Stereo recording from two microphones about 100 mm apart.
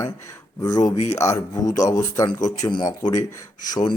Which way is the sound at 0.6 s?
40° left (ahead or behind).